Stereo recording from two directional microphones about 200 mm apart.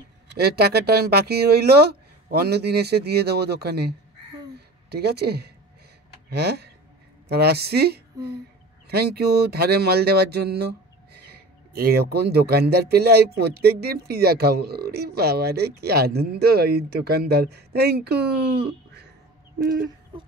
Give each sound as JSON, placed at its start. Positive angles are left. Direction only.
{"t": 0.3, "sound": "speech", "side_deg": -55}
{"t": 4.9, "sound": "speech", "side_deg": -55}